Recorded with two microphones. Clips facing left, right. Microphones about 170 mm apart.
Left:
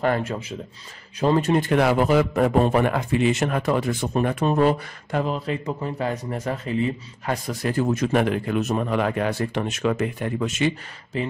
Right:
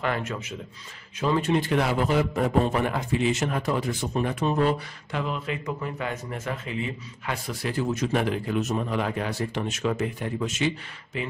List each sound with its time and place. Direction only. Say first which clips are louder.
0.0 s a man's voice: left 5 dB; 35° left (ahead or behind); by 10.7 s 60° left (ahead or behind)
11.1 s speech: left 5 dB; 40° left (ahead or behind)